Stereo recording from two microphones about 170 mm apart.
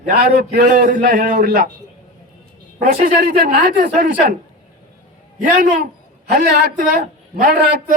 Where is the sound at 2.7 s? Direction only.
60° right (ahead or behind).